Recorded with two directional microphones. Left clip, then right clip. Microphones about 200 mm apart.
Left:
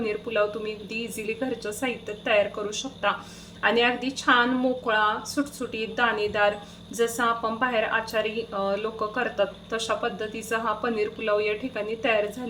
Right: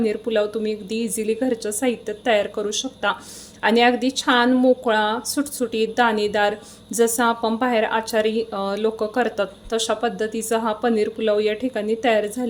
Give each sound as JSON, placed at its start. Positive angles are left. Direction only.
{"t": 0.0, "sound": "a woman's voice", "side_deg": -35}